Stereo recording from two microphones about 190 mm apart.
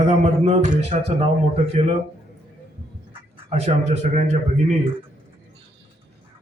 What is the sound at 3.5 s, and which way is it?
Speech, 35° right (ahead or behind).